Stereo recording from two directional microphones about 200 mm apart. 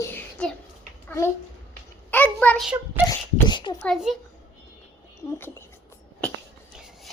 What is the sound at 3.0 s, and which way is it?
Beatboxing, 20° left (ahead or behind).